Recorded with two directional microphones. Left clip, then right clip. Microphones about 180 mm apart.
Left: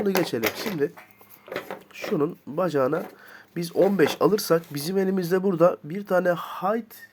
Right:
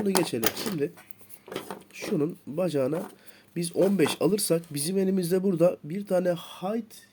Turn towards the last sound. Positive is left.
turn(degrees=-30)  # may be behind; listen again after turning